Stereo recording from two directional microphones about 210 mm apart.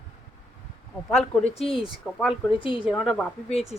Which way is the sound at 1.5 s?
30° left (ahead or behind).